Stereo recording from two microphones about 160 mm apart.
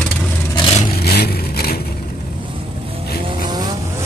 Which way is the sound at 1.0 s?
85° left.